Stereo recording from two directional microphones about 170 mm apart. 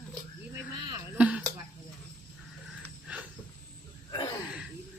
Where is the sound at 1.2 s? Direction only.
5° right (ahead or behind).